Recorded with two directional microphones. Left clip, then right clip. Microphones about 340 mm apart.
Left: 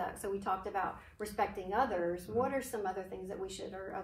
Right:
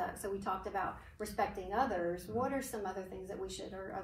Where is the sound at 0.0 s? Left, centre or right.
Centre.